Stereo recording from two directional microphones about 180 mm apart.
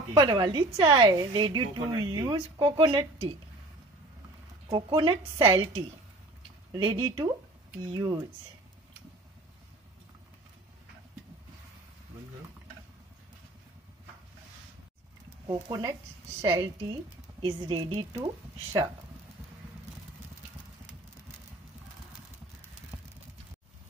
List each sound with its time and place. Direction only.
0.1 s a woman's voice: 25° right (ahead or behind)
4.6 s a woman's voice: 25° right (ahead or behind)
15.4 s a woman's voice: 25° right (ahead or behind)